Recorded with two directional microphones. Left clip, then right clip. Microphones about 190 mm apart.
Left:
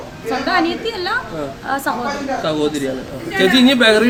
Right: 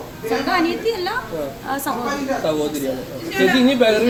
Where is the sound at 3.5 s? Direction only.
45° left (ahead or behind).